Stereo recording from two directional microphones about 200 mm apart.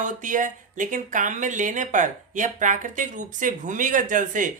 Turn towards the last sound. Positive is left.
turn(degrees=-40)  # may be behind; listen again after turning